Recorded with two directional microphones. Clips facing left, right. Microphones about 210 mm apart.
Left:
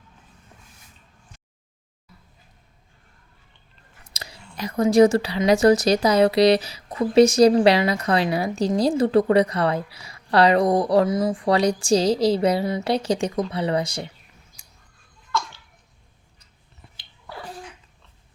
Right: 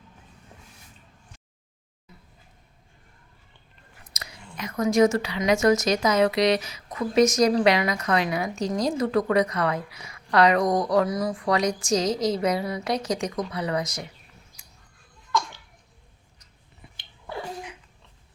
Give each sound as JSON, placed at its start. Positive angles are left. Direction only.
{"t": 4.1, "sound": "speech", "side_deg": 30}